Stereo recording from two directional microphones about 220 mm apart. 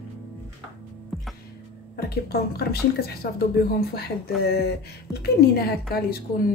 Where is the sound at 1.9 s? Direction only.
45° left (ahead or behind).